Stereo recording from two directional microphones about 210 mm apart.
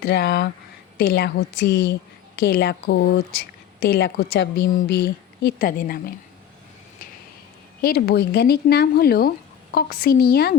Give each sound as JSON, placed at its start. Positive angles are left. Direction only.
{"t": 0.0, "sound": "a woman's voice", "side_deg": 50}
{"t": 7.8, "sound": "a woman's voice", "side_deg": 45}